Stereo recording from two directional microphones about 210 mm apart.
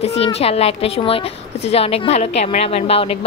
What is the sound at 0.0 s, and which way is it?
A woman's voice, 30° left (ahead or behind).